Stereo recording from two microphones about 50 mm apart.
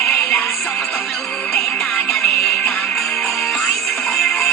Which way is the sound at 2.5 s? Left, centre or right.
Centre.